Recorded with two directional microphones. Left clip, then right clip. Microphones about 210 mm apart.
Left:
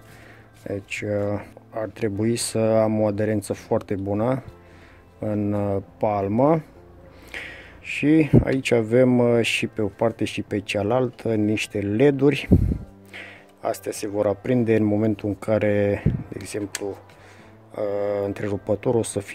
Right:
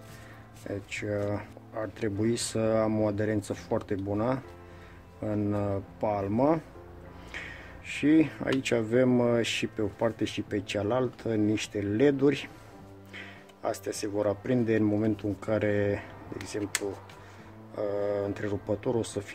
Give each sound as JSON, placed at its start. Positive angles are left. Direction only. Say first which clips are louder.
{"t": 0.7, "sound": "speech", "louder": "left 6 dB", "side_deg": 35}